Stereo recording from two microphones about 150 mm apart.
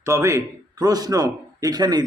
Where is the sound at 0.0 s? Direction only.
20° right (ahead or behind).